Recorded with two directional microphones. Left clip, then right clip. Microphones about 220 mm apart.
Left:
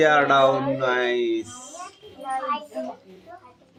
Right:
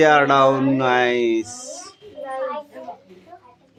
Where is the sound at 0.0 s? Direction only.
30° right (ahead or behind).